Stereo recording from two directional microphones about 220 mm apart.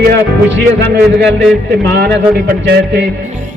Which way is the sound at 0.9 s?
50° right (ahead or behind).